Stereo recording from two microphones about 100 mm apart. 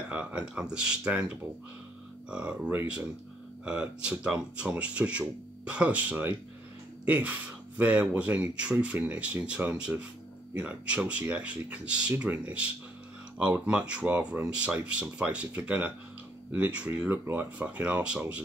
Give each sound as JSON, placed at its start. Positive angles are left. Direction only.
{"t": 0.1, "sound": "speech", "side_deg": -15}